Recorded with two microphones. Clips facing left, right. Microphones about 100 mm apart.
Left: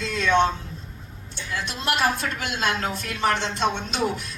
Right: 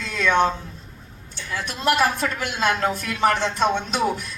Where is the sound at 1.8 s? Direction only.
50° right (ahead or behind).